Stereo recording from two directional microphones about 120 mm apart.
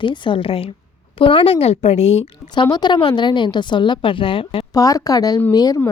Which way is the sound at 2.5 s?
35° left (ahead or behind).